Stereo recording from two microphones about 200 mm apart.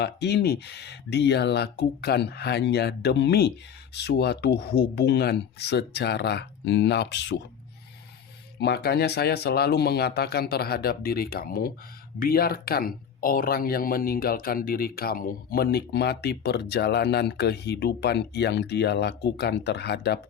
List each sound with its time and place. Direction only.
0.0 s speech: 55° left (ahead or behind)
8.5 s speech: 55° left (ahead or behind)